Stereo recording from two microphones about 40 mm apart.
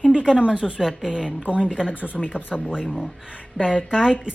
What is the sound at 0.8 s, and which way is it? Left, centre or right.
Speech, centre.